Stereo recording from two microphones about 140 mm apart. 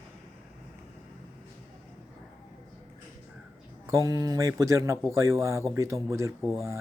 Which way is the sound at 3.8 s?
25° right (ahead or behind).